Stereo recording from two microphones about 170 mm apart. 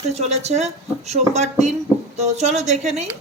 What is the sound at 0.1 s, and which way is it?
A woman's voice, 40° right (ahead or behind).